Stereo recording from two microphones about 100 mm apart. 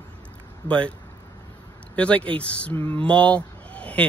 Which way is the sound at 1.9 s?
15° left (ahead or behind).